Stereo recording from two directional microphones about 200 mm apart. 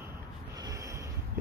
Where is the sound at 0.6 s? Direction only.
15° right (ahead or behind).